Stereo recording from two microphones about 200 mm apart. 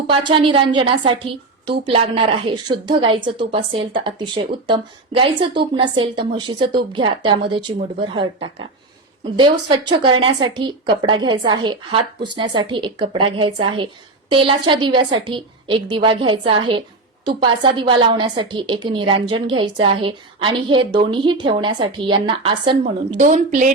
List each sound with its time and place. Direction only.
0.1 s a woman's voice: 25° right (ahead or behind)
22.8 s speech: 40° right (ahead or behind)